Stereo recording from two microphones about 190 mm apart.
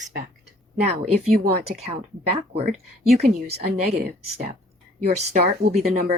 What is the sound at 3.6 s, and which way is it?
Speech, 55° right (ahead or behind).